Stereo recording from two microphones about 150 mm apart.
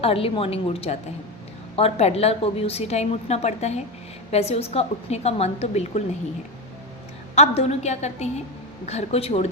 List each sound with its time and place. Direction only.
0.0 s a woman's voice: 40° left (ahead or behind)
7.3 s a woman's voice: 45° left (ahead or behind)